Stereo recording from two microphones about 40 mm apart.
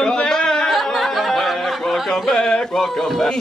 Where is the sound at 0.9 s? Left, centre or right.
Centre.